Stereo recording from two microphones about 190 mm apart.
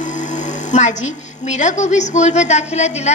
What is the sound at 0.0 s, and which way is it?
A woman's voice, 40° left (ahead or behind).